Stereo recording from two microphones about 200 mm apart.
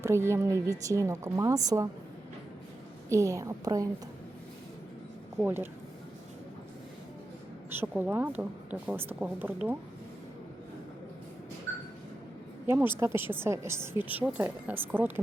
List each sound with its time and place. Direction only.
0.0 s a woman's voice: 15° right (ahead or behind)
3.1 s a woman's voice: 15° right (ahead or behind)
5.4 s a woman's voice: 10° right (ahead or behind)
7.7 s a woman's voice: 10° right (ahead or behind)
12.6 s a woman's voice: 10° right (ahead or behind)